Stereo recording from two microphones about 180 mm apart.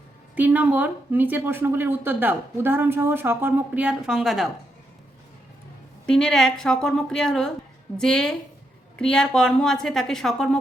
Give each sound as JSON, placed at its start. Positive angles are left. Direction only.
{"t": 0.3, "sound": "speech", "side_deg": -10}
{"t": 6.1, "sound": "a woman's voice", "side_deg": 5}